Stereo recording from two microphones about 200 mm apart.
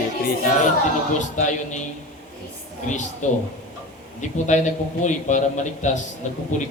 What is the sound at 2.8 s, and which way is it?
A man's voice, 40° left (ahead or behind).